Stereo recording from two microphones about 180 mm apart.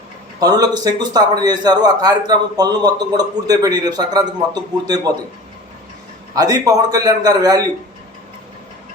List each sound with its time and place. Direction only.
0.3 s a man's voice: 20° right (ahead or behind)
6.3 s a man's voice: 20° right (ahead or behind)